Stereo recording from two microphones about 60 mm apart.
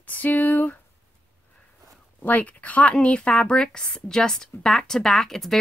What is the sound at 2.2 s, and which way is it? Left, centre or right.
A woman's voice, left.